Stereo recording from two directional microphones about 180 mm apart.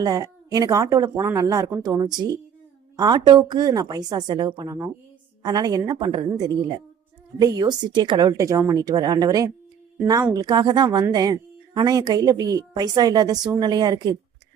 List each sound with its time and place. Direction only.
0.0 s speech: 20° right (ahead or behind)